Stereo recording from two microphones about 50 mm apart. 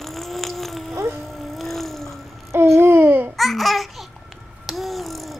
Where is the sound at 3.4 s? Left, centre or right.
Centre.